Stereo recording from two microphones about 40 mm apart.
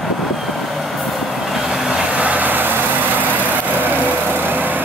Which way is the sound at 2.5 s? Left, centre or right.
Right.